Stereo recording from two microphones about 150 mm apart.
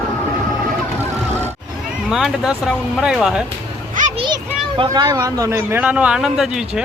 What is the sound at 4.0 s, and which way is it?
Children playing, 60° right (ahead or behind).